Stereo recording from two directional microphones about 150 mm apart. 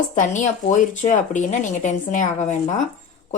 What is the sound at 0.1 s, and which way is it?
Speech, 55° left (ahead or behind).